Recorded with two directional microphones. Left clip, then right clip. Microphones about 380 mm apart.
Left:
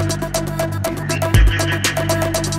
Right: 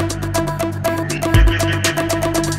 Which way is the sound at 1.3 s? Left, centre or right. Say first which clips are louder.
Right 2 dB; centre.